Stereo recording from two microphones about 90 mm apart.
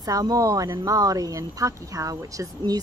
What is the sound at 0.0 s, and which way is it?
A woman's voice, 45° right (ahead or behind).